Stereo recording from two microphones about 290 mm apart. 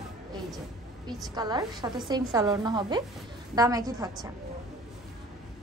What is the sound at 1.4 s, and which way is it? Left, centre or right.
A woman's voice, centre.